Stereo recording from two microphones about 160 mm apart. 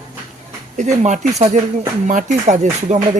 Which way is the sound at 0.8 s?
50° right (ahead or behind).